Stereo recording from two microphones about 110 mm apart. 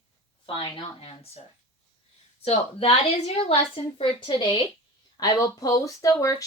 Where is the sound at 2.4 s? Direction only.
65° left (ahead or behind); by 4.6 s 45° left (ahead or behind).